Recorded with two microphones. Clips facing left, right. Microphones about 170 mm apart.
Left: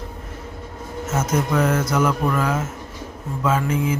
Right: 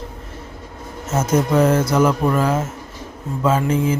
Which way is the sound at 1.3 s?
30° right (ahead or behind).